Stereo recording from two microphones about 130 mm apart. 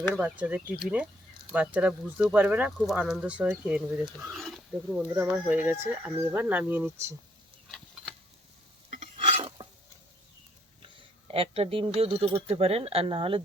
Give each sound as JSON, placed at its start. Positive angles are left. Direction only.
{"t": 0.1, "sound": "speech", "side_deg": -10}
{"t": 8.9, "sound": "stir", "side_deg": -60}
{"t": 10.8, "sound": "speech", "side_deg": -45}